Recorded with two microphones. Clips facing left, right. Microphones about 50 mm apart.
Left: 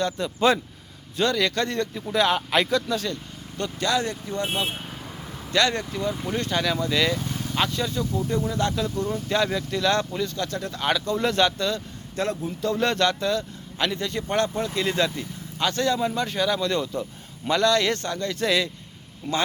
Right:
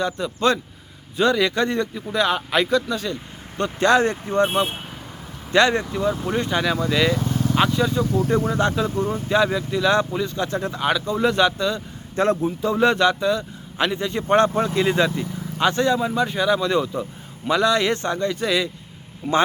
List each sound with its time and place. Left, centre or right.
0.3 s speech: centre
1.1 s a man's voice: centre
1.9 s speech: centre
3.6 s speech: right
5.5 s a man's voice: right
8.5 s speech: right
9.3 s a man's voice: centre
10.8 s a man's voice: centre
12.1 s speech: right
12.5 s a man's voice: centre
16.0 s a man's voice: centre